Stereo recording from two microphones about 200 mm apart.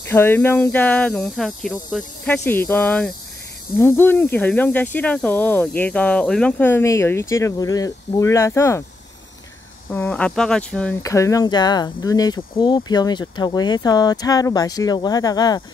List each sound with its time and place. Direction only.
0.0 s speech: 10° left (ahead or behind)
9.8 s speech: 10° left (ahead or behind)